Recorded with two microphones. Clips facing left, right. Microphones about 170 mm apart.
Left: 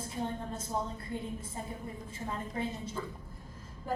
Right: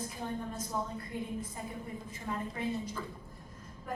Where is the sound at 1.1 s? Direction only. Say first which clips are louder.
Right 1 dB; 30° left (ahead or behind).